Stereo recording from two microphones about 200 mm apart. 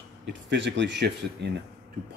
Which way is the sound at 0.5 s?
60° right (ahead or behind).